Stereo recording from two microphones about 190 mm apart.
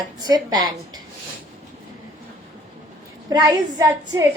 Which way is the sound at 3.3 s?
20° right (ahead or behind).